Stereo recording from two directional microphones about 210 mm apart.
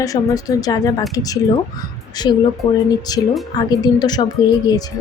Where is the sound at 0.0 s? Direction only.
15° left (ahead or behind).